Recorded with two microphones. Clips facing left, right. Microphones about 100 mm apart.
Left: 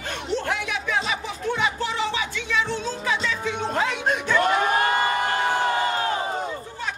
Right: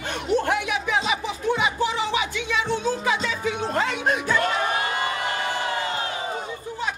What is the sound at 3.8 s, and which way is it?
Speech, centre (ahead or behind).